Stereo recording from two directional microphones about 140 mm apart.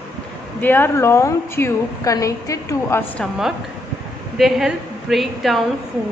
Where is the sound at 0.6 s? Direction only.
15° left (ahead or behind).